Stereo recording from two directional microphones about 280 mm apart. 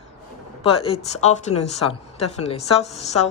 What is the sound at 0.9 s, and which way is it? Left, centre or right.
A woman's voice, left.